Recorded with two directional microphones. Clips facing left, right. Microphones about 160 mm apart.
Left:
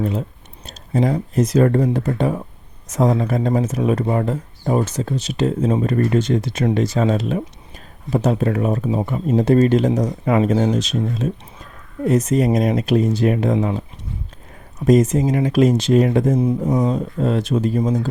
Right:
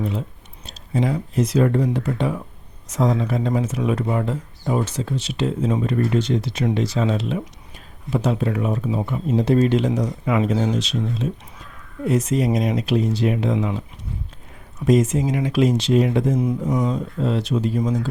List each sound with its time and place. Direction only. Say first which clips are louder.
0.0 s speech: left 3 dB; 45° left (ahead or behind)
16.6 s speech: left 3 dB; 25° left (ahead or behind)
16.9 s speech: left 3 dB; 50° left (ahead or behind)